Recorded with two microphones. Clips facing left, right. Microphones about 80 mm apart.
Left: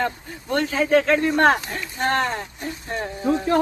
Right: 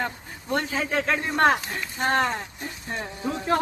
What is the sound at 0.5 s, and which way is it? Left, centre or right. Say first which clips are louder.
A man's voice: left 7 dB; left.